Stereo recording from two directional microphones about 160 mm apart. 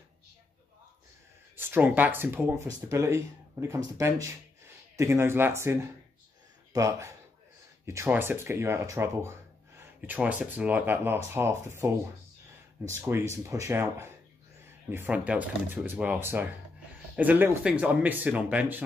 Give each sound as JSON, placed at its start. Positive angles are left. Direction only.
{"t": 1.6, "sound": "speech", "side_deg": -10}